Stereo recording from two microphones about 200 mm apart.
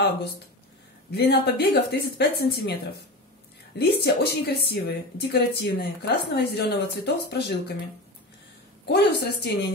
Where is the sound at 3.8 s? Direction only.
55° left (ahead or behind).